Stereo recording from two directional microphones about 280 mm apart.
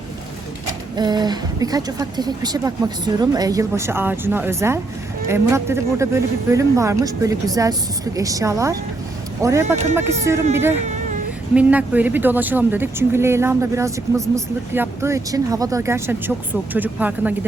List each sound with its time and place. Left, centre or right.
0.9 s speech: centre
11.5 s speech: centre